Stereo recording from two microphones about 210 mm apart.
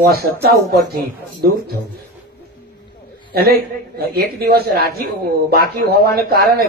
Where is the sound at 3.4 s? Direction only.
45° right (ahead or behind).